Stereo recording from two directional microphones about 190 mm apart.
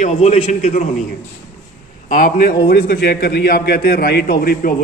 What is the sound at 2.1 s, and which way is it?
A man's voice, 50° left (ahead or behind).